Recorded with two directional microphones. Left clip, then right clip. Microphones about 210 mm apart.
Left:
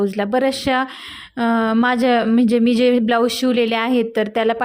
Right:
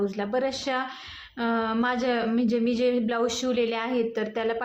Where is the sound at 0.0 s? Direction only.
40° left (ahead or behind).